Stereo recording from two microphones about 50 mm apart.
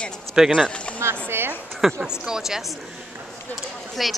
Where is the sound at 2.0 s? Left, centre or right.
Centre.